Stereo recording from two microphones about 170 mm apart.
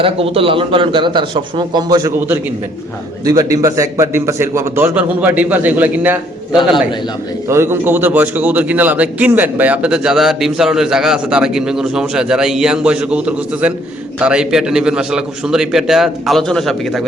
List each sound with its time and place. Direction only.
0.0 s a man's voice: 35° right (ahead or behind); by 17.0 s centre (ahead or behind)